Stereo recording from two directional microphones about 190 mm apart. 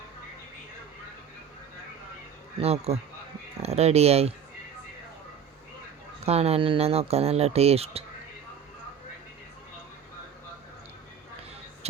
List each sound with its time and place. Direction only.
2.6 s speech: 35° right (ahead or behind)
6.2 s speech: 35° right (ahead or behind)